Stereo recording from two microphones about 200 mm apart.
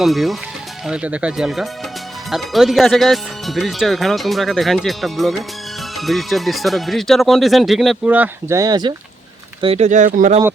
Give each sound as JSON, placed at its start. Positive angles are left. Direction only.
{"t": 0.0, "sound": "speech", "side_deg": 0}
{"t": 9.6, "sound": "speech", "side_deg": -30}